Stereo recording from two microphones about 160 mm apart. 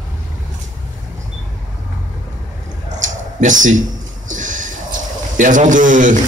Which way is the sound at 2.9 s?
50° right (ahead or behind).